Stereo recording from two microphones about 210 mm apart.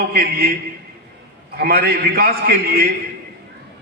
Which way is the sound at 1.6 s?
50° right (ahead or behind).